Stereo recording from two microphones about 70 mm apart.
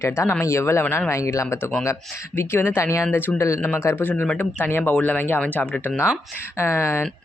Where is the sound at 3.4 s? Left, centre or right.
Left.